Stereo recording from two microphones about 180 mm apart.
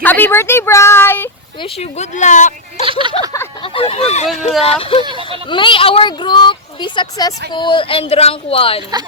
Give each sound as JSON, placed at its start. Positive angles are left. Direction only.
{"t": 0.0, "sound": "a woman's voice", "side_deg": 10}
{"t": 1.6, "sound": "speech", "side_deg": 35}
{"t": 2.8, "sound": "speech", "side_deg": -30}
{"t": 3.6, "sound": "speech", "side_deg": 30}
{"t": 5.0, "sound": "a sound", "side_deg": -30}
{"t": 5.5, "sound": "speech", "side_deg": 25}